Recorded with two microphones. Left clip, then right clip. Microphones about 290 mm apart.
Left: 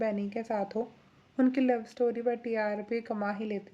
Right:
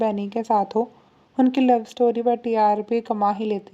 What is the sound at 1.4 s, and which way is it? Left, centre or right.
Speech, right.